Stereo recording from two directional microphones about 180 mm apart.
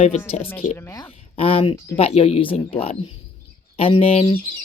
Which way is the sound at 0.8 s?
15° left (ahead or behind).